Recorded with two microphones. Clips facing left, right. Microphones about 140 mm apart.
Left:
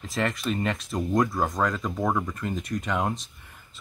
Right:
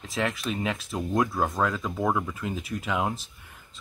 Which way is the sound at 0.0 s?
Centre (ahead or behind).